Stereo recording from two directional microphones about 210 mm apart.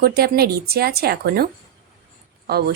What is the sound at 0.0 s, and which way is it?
Speech, 50° right (ahead or behind).